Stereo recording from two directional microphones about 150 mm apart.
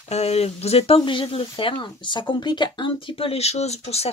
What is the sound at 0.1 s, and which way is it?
Speech, 45° left (ahead or behind).